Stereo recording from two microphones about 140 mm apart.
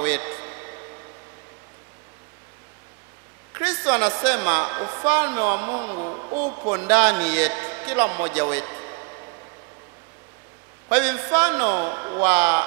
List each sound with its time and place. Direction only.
0.0 s a sound: 20° right (ahead or behind)
3.5 s a woman's voice: 20° right (ahead or behind)
10.9 s a woman's voice: 20° right (ahead or behind)